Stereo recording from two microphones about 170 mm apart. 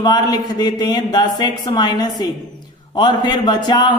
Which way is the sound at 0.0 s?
25° left (ahead or behind).